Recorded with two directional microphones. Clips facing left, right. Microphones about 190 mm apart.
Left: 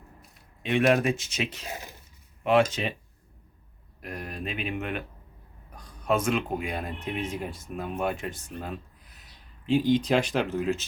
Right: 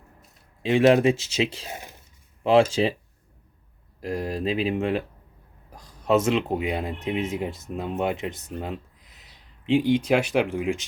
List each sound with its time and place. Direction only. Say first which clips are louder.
0.6 s speech: right 5 dB; 30° right (ahead or behind)
4.0 s speech: right 9 dB; 25° right (ahead or behind)